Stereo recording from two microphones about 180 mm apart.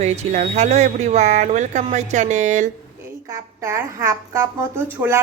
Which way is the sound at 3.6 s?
15° right (ahead or behind).